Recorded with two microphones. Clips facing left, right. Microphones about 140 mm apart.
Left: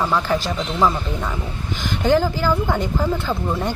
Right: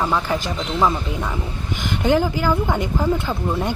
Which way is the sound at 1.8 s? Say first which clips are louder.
Left 1 dB; 20° right (ahead or behind).